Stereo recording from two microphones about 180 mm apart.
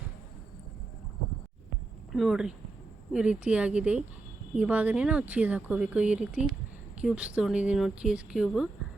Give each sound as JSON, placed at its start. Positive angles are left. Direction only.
{"t": 2.1, "sound": "speech", "side_deg": 0}